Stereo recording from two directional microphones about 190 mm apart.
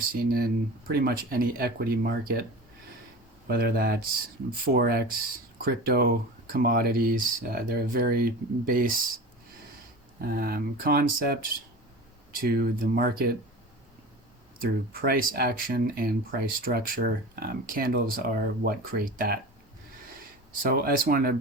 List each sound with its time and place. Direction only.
0.3 s speech: 50° right (ahead or behind)
10.2 s speech: 50° right (ahead or behind)
12.4 s speech: 50° right (ahead or behind)
14.6 s speech: 50° right (ahead or behind)
20.5 s speech: 50° right (ahead or behind)